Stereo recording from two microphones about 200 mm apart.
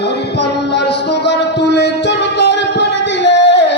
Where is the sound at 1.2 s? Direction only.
60° left (ahead or behind).